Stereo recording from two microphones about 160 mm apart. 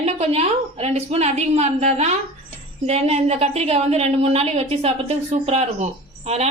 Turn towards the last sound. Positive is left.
turn(degrees=-40)  # may be behind; listen again after turning